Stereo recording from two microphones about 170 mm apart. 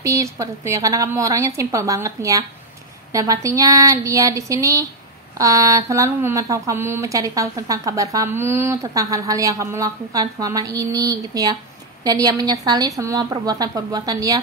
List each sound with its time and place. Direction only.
0.0 s speech: 20° right (ahead or behind)